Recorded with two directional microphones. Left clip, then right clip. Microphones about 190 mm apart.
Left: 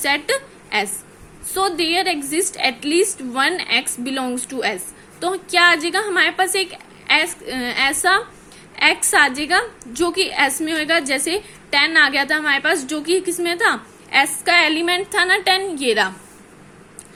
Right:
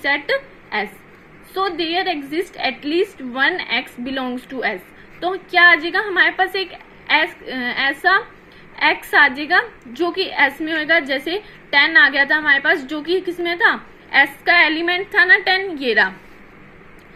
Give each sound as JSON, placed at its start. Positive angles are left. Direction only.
{"t": 0.0, "sound": "a woman's voice", "side_deg": 15}